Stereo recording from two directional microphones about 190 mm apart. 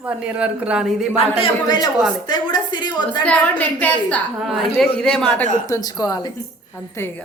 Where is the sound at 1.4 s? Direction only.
25° left (ahead or behind).